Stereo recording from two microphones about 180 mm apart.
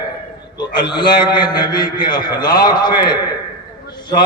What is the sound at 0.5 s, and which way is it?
A man's voice, 25° left (ahead or behind).